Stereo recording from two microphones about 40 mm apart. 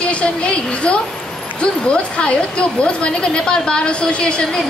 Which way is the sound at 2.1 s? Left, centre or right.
Left.